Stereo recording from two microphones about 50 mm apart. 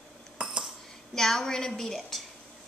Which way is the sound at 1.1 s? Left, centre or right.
Centre.